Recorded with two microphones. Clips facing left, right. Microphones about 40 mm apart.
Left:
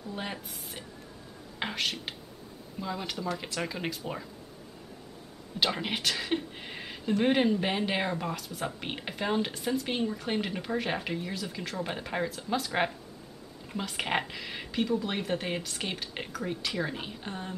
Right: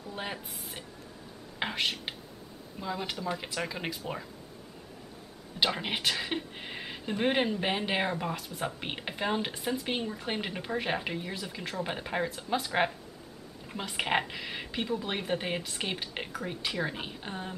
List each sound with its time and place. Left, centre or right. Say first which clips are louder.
0.1 s speech: even; centre
5.6 s speech: even; centre